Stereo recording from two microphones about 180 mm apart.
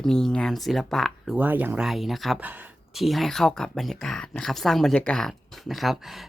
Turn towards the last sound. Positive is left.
turn(degrees=0)  # may be behind; listen again after turning